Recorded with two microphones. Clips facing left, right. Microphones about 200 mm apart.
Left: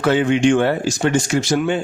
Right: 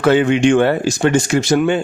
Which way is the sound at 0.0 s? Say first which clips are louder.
Right 3 dB; 65° right (ahead or behind).